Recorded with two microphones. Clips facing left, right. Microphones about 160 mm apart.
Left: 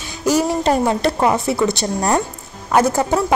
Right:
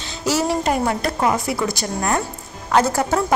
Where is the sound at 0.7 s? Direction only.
25° left (ahead or behind).